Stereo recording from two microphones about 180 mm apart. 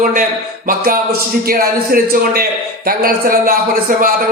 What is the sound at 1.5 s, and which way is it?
A man's voice, 55° right (ahead or behind).